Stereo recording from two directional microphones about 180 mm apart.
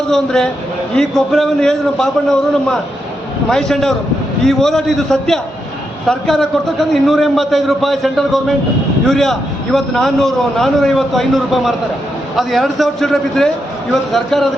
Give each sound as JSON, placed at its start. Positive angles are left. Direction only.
{"t": 0.1, "sound": "a man's voice", "side_deg": 5}